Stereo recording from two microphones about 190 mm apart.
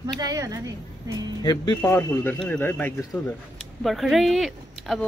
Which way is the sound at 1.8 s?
10° left (ahead or behind).